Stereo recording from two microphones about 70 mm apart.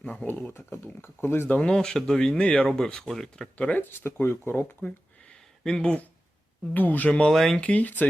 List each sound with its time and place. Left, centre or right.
0.0 s speech: centre
0.3 s speech: left
1.5 s speech: centre
3.6 s speech: left
5.3 s a sound: centre
6.7 s speech: left
7.1 s speech: centre